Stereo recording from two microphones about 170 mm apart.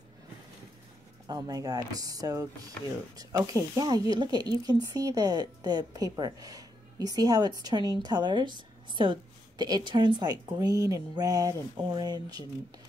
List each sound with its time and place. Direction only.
1.2 s a woman's voice: 20° right (ahead or behind)